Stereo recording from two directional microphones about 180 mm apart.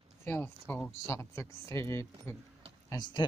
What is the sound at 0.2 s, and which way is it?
Speech, 10° left (ahead or behind).